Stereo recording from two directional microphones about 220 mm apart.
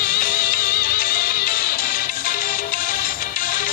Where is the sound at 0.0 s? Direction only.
40° left (ahead or behind).